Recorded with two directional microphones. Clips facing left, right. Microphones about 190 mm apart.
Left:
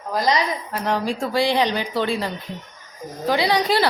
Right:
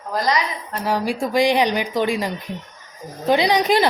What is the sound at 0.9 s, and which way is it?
A woman's voice, 10° right (ahead or behind).